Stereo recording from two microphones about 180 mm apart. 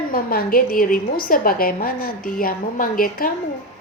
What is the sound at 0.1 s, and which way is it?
A woman's voice, 55° left (ahead or behind).